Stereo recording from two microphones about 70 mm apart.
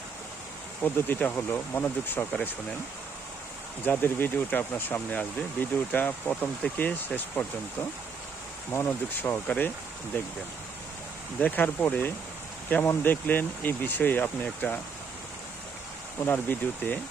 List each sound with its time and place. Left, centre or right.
0.8 s speech: left
4.0 s speech: left
8.7 s speech: left
11.3 s speech: left
16.2 s speech: left